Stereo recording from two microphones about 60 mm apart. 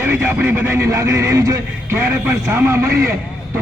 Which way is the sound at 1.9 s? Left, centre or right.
Right.